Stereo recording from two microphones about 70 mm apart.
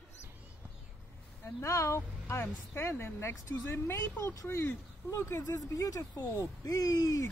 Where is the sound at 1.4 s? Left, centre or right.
Left.